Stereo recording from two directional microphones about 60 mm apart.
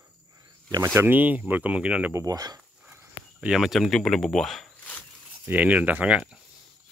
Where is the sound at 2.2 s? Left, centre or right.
Right.